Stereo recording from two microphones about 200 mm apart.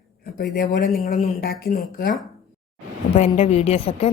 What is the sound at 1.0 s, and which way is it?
Speech, 35° left (ahead or behind).